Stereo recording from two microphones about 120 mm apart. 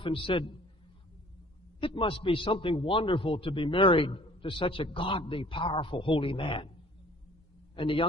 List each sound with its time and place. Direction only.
0.0 s a man's voice: 45° left (ahead or behind)
1.8 s a man's voice: 45° left (ahead or behind)
7.7 s a man's voice: 45° left (ahead or behind)